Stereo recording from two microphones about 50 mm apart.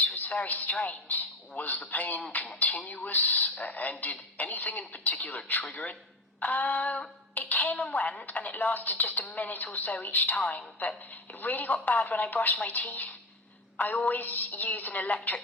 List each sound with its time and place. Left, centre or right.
0.0 s a man's voice: left